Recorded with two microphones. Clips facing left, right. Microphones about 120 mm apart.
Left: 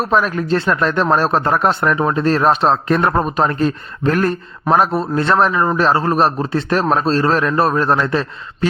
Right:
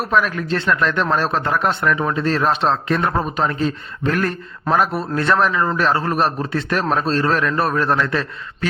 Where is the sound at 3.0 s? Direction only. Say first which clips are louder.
Left 4 dB; 55° left (ahead or behind).